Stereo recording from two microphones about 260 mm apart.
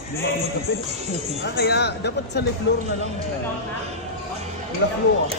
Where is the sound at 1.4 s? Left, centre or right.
Left.